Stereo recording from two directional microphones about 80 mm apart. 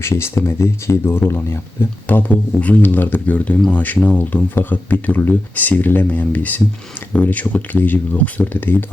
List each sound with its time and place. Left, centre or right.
0.0 s speech: left